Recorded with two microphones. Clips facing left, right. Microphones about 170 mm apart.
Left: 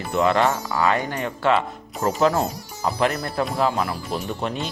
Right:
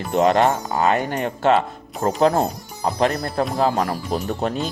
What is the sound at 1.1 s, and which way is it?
Speech, 45° right (ahead or behind).